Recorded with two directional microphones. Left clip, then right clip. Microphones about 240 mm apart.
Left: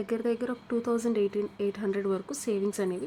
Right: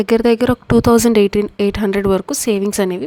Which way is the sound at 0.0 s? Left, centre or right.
Right.